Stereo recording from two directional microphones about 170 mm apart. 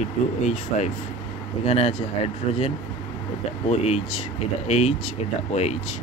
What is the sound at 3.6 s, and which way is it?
Speech, 40° left (ahead or behind).